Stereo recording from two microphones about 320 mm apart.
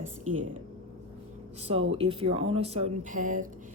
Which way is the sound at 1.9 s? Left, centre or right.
Centre.